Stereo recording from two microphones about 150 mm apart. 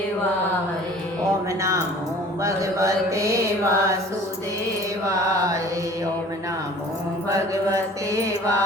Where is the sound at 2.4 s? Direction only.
20° right (ahead or behind).